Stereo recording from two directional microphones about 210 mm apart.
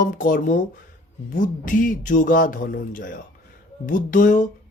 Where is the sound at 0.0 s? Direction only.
40° left (ahead or behind).